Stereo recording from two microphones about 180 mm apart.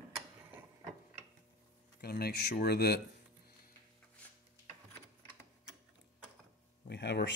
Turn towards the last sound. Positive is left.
turn(degrees=70)  # may be behind; listen again after turning